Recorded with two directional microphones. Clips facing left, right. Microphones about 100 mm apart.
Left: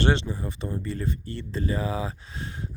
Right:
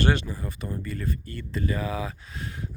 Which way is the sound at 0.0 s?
25° left (ahead or behind).